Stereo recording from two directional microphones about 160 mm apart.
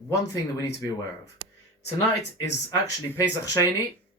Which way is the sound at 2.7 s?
20° left (ahead or behind).